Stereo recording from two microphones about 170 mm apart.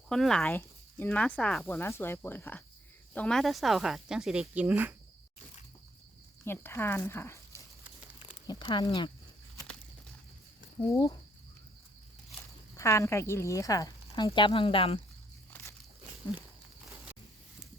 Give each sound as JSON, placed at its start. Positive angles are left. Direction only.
{"t": 0.1, "sound": "speech", "side_deg": 5}
{"t": 6.4, "sound": "speech", "side_deg": 15}
{"t": 8.3, "sound": "a sound", "side_deg": 25}
{"t": 10.9, "sound": "speech", "side_deg": 20}
{"t": 12.7, "sound": "speech", "side_deg": 15}
{"t": 15.4, "sound": "walk", "side_deg": 10}